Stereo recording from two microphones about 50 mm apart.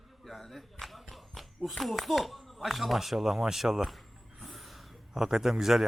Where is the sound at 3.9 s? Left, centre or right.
Centre.